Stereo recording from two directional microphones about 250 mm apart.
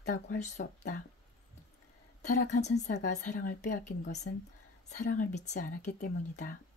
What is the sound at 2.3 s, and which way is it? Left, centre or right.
A woman's voice, left.